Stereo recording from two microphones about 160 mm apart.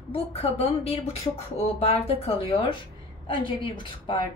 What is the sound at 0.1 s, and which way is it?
Speech, 40° left (ahead or behind).